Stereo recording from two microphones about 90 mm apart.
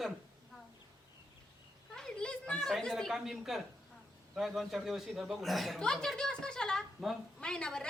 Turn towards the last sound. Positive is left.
turn(degrees=10)  # may be behind; listen again after turning